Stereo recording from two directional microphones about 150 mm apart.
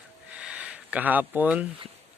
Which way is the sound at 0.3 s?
10° right (ahead or behind).